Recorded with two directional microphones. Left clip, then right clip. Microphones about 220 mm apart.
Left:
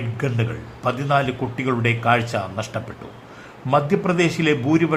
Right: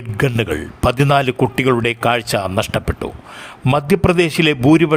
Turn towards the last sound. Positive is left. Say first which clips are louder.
# right 6 dB
turn(degrees=-45)  # may be behind; listen again after turning